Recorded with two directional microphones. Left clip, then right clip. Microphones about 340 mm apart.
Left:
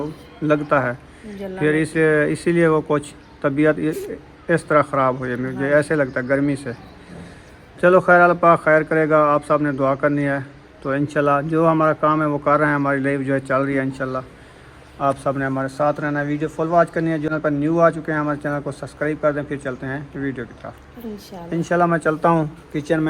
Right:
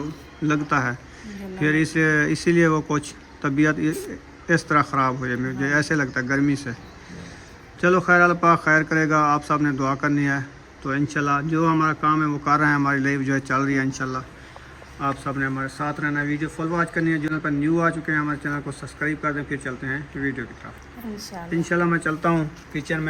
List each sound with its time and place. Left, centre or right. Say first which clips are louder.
0.4 s a man's voice: left 4 dB; centre
7.8 s a man's voice: left 4 dB; centre
15.5 s a man's voice: left 7 dB; centre
20.1 s speech: left 1 dB; left
21.6 s a man's voice: left 5 dB; centre